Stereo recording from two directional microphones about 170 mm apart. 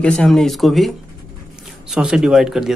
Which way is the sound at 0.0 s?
5° left (ahead or behind).